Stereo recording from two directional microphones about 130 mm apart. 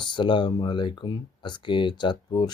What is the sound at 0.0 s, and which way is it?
Speech, 40° left (ahead or behind).